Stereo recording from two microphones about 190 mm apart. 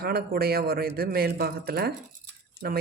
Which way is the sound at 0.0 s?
55° right (ahead or behind).